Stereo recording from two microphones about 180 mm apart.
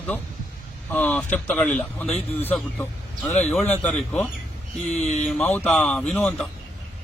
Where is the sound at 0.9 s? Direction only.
10° left (ahead or behind).